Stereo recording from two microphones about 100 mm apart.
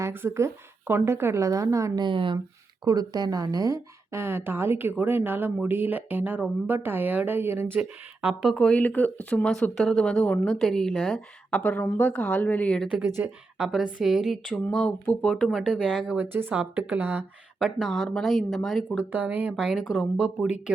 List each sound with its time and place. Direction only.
0.0 s a woman's voice: 25° right (ahead or behind)
2.0 s speech: 55° right (ahead or behind)
2.8 s a woman's voice: 40° right (ahead or behind); by 7.7 s 20° right (ahead or behind)
7.8 s speech: 10° right (ahead or behind)
8.5 s speech: 10° left (ahead or behind)
11.6 s speech: 20° left (ahead or behind)
13.2 s speech: 5° right (ahead or behind); by 15.3 s 10° left (ahead or behind)
15.3 s speech: centre (ahead or behind)
16.1 s speech: 20° right (ahead or behind)
17.6 s speech: 5° right (ahead or behind)
18.9 s speech: 15° right (ahead or behind)